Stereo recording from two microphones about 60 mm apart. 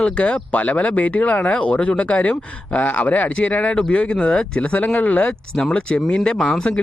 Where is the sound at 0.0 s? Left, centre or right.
Centre.